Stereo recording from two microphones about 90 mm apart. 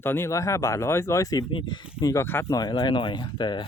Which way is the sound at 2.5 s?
50° left (ahead or behind).